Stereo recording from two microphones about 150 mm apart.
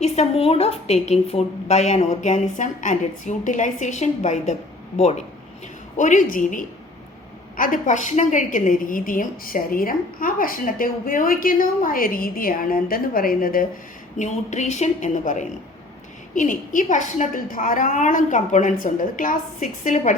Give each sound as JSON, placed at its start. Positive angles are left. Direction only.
{"t": 0.0, "sound": "a woman's voice", "side_deg": 45}
{"t": 6.0, "sound": "a woman's voice", "side_deg": 55}
{"t": 14.2, "sound": "a woman's voice", "side_deg": 50}